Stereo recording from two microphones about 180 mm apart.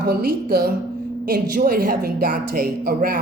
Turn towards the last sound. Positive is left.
turn(degrees=-55)  # may be behind; listen again after turning